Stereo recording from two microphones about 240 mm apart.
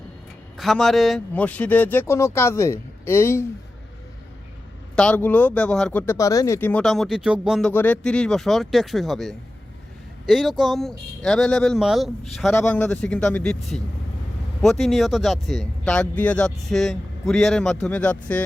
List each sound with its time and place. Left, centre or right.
0.5 s a man's voice: centre
4.9 s speech: centre